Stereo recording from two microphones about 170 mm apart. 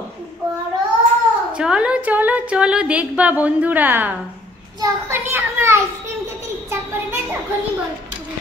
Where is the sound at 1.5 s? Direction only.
5° right (ahead or behind).